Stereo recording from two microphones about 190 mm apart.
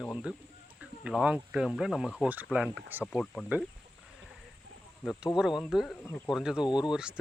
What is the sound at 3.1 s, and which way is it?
Speech, 5° left (ahead or behind).